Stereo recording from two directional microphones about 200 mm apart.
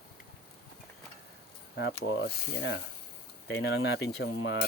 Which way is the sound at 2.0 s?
60° left (ahead or behind).